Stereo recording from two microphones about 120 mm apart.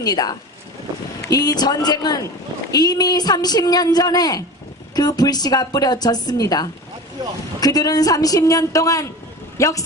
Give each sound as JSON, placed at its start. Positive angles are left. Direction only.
{"t": 0.0, "sound": "a woman's voice", "side_deg": 35}